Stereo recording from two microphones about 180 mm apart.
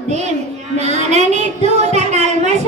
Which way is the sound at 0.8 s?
40° right (ahead or behind).